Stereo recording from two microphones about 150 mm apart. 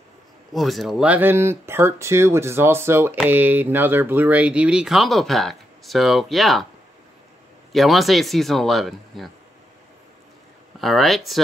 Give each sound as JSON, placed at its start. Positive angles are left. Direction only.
{"t": 0.5, "sound": "speech", "side_deg": 0}
{"t": 7.7, "sound": "speech", "side_deg": 0}
{"t": 10.8, "sound": "speech", "side_deg": 0}